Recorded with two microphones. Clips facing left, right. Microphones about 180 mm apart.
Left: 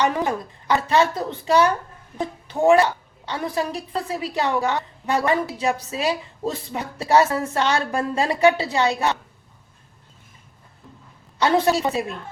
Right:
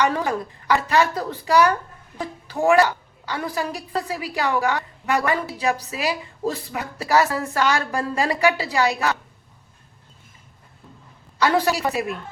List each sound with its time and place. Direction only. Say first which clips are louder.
0.0 s a woman's voice: even; 20° left (ahead or behind)
11.3 s a woman's voice: left 1 dB; 25° left (ahead or behind)